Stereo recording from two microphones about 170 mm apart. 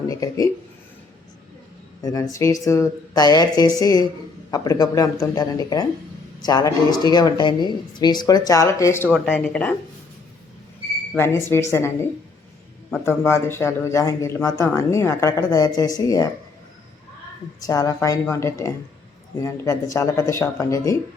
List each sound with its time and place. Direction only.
0.1 s speech: 20° left (ahead or behind)
2.0 s speech: 20° left (ahead or behind); by 9.7 s 5° left (ahead or behind)
11.2 s a man's voice: 15° left (ahead or behind)
13.1 s a man's voice: 15° left (ahead or behind)
17.6 s speech: 20° left (ahead or behind)